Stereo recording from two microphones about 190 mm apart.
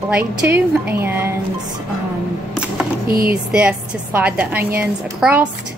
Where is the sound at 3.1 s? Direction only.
50° right (ahead or behind).